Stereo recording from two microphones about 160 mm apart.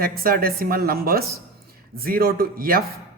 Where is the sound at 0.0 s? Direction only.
65° right (ahead or behind).